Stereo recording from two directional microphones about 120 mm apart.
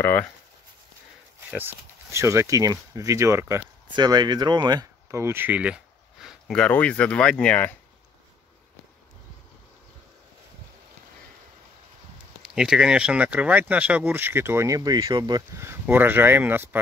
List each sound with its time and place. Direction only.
0.0 s speech: 15° left (ahead or behind)
1.5 s speech: 15° right (ahead or behind)
3.9 s speech: 35° right (ahead or behind)
5.2 s a sound: 20° right (ahead or behind)
6.5 s speech: 10° left (ahead or behind)
12.5 s speech: 5° right (ahead or behind); by 15.4 s 35° right (ahead or behind)
15.5 s speech: 20° right (ahead or behind)